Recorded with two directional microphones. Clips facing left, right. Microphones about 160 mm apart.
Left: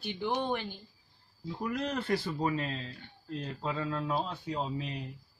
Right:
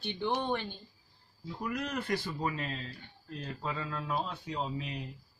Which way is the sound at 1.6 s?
30° left (ahead or behind).